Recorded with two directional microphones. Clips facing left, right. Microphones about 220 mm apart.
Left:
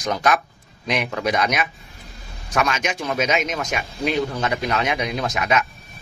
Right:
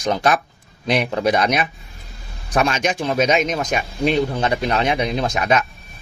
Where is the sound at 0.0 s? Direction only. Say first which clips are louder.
Right 2 dB; 30° right (ahead or behind).